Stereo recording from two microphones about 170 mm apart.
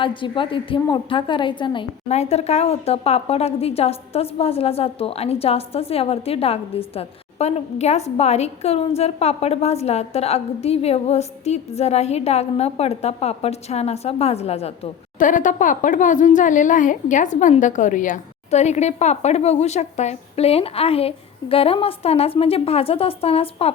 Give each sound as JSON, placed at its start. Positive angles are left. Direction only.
{"t": 0.0, "sound": "a woman's voice", "side_deg": 30}
{"t": 15.2, "sound": "a woman's voice", "side_deg": 50}